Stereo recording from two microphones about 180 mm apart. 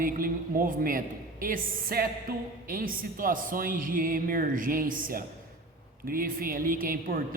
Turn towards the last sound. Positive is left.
turn(degrees=-50)  # may be behind; listen again after turning